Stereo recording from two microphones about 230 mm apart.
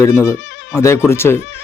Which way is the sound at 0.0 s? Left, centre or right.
Centre.